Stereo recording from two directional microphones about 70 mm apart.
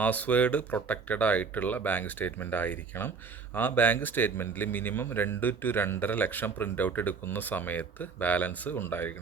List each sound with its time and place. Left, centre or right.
0.0 s speech: left